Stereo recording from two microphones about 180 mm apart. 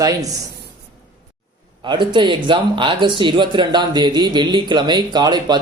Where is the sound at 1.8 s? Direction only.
25° right (ahead or behind).